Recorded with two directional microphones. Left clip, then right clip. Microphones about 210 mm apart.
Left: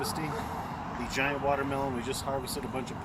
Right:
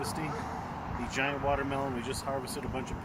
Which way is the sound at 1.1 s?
5° right (ahead or behind).